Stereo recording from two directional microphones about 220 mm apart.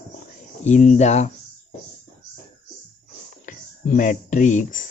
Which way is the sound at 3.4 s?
35° left (ahead or behind).